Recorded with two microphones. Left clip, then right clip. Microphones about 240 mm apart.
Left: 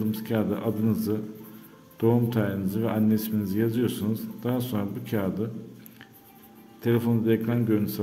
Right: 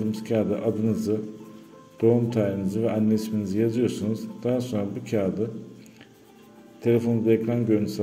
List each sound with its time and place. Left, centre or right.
0.1 s a man's voice: centre
6.8 s a man's voice: centre